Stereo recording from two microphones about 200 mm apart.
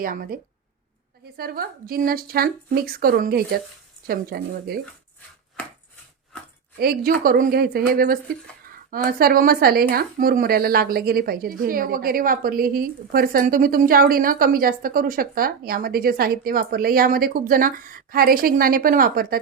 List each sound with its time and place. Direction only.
0.0 s a woman's voice: 45° right (ahead or behind)
1.4 s a woman's voice: 50° right (ahead or behind)
6.7 s a woman's voice: 50° right (ahead or behind)